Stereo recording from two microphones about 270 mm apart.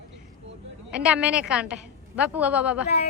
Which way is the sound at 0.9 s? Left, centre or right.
Centre.